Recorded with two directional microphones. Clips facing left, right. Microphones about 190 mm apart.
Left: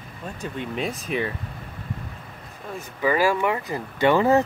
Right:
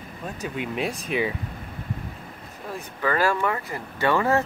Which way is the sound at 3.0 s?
10° left (ahead or behind).